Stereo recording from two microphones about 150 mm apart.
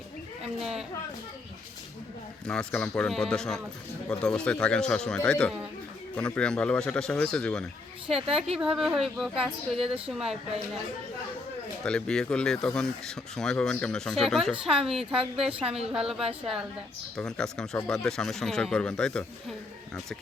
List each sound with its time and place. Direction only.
0.6 s a sound: 5° right (ahead or behind)
2.5 s speech: 5° left (ahead or behind)
8.0 s a woman's voice: 40° right (ahead or behind)
8.5 s speech: 5° right (ahead or behind)
11.8 s speech: 5° left (ahead or behind)